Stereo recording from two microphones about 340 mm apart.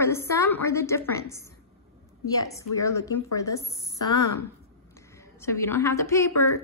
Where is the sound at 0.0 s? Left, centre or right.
Centre.